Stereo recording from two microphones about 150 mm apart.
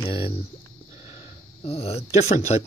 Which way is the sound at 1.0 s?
40° left (ahead or behind).